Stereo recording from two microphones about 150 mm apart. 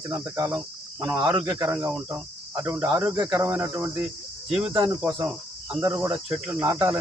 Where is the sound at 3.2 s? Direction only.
15° right (ahead or behind).